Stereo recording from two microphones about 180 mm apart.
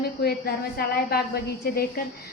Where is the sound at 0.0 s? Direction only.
60° left (ahead or behind).